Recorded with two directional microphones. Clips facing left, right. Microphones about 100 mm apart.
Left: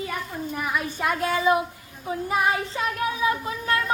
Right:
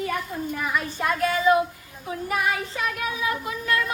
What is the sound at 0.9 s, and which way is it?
Speech, 15° left (ahead or behind).